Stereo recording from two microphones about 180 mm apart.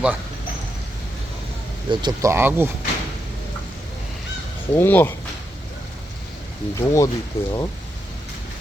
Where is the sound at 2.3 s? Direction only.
10° right (ahead or behind).